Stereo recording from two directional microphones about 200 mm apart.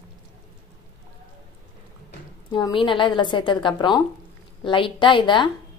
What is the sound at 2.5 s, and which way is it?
Speech, 25° left (ahead or behind).